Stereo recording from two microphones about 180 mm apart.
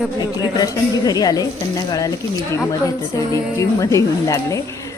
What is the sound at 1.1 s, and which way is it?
Speech, 20° left (ahead or behind).